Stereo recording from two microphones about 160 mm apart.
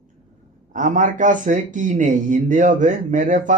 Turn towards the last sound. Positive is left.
turn(degrees=-50)  # may be behind; listen again after turning